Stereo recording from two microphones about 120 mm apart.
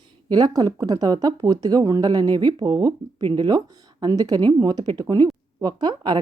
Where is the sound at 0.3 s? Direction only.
35° right (ahead or behind).